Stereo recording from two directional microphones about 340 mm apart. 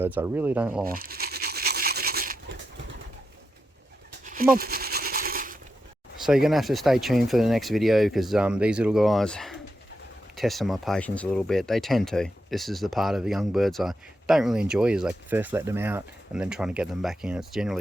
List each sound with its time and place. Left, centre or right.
0.0 s speech: centre
0.9 s rub: right
4.3 s a sound: right
6.2 s speech: centre